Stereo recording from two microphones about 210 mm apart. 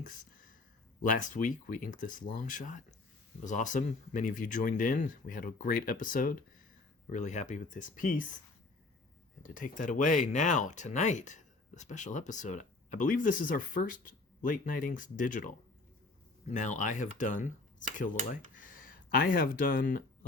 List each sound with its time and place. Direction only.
1.0 s speech: 40° left (ahead or behind)
9.4 s speech: 40° left (ahead or behind)
18.5 s a sound: 40° left (ahead or behind)